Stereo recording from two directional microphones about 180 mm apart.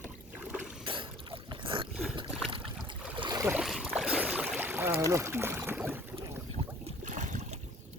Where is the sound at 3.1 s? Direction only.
25° right (ahead or behind).